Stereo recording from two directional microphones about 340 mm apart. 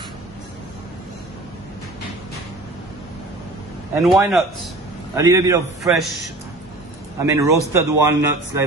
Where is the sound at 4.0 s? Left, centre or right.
Centre.